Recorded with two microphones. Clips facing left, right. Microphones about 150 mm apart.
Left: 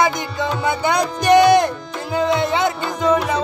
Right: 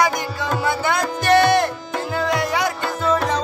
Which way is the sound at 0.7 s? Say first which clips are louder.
Left 3 dB; 20° left (ahead or behind).